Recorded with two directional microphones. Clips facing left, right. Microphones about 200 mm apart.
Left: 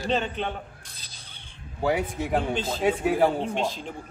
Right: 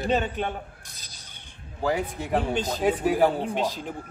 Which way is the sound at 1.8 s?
5° left (ahead or behind).